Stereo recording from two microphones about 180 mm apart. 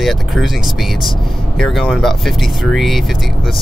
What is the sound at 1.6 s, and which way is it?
Speech, centre (ahead or behind).